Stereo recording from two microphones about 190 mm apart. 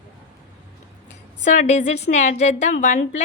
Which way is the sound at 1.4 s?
40° left (ahead or behind).